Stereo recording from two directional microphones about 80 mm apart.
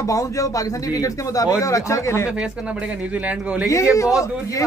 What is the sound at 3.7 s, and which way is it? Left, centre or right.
Speech, left.